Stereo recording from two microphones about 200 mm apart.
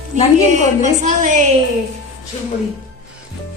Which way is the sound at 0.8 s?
35° right (ahead or behind).